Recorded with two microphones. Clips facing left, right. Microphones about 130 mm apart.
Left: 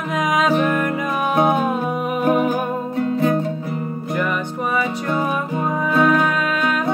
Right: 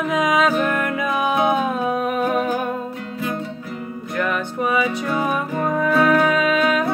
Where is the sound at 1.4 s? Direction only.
40° left (ahead or behind).